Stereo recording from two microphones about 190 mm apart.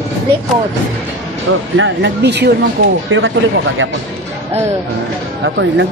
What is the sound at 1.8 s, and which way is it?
Speech, 70° right (ahead or behind).